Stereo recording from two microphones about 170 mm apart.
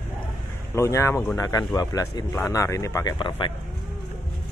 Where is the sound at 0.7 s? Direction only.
15° left (ahead or behind).